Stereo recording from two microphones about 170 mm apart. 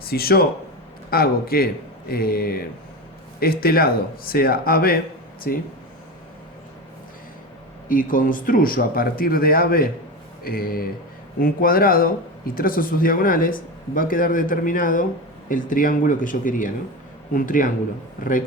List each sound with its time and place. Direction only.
0.0 s speech: 65° left (ahead or behind)
7.9 s speech: 55° left (ahead or behind)